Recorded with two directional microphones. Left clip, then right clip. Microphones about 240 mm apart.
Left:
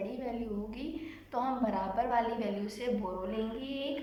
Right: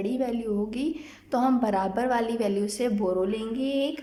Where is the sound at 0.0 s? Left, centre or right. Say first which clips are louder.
Right 9 dB; right.